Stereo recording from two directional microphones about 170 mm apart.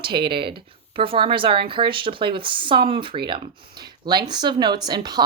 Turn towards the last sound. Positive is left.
turn(degrees=-25)  # may be behind; listen again after turning